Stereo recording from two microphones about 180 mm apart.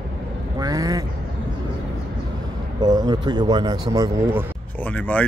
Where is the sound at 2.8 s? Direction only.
20° right (ahead or behind).